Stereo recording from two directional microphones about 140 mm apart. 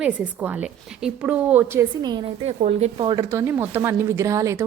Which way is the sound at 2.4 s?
50° right (ahead or behind).